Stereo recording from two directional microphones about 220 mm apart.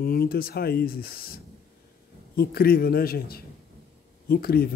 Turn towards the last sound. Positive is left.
turn(degrees=45)  # may be behind; listen again after turning